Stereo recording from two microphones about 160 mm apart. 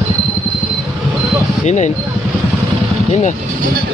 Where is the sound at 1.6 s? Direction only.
45° left (ahead or behind).